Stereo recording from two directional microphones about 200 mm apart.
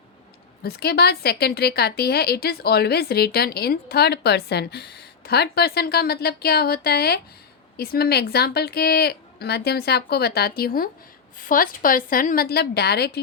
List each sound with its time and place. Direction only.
0.6 s a woman's voice: 50° left (ahead or behind)